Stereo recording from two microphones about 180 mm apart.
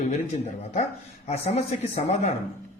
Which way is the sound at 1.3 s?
35° left (ahead or behind).